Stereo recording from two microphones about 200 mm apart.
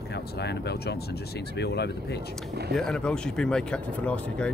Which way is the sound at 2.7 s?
5° left (ahead or behind).